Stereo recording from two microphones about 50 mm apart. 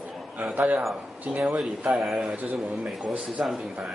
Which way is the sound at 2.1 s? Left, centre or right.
Centre.